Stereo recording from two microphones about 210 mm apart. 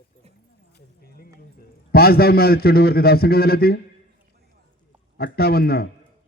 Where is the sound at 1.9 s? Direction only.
45° left (ahead or behind).